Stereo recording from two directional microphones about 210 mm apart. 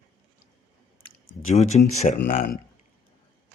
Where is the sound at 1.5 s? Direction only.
30° left (ahead or behind).